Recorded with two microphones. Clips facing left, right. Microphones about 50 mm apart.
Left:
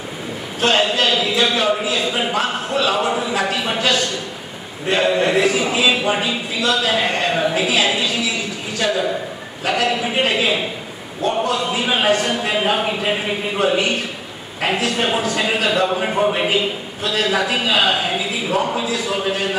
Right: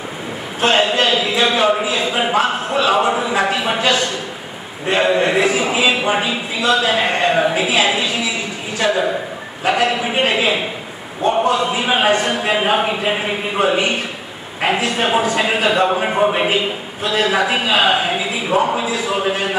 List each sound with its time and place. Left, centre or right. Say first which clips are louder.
0.6 s a man's voice: right 2 dB; centre